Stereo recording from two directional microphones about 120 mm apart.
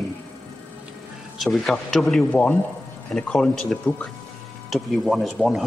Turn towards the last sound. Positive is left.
turn(degrees=0)  # may be behind; listen again after turning